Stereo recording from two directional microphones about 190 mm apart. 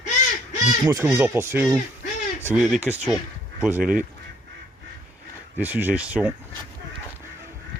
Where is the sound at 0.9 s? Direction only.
15° right (ahead or behind).